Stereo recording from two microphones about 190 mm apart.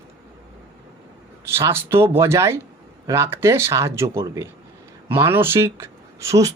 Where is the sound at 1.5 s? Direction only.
15° right (ahead or behind).